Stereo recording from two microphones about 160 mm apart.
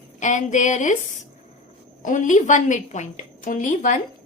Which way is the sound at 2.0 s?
50° left (ahead or behind).